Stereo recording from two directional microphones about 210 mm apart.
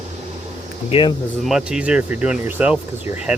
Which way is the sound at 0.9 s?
25° left (ahead or behind).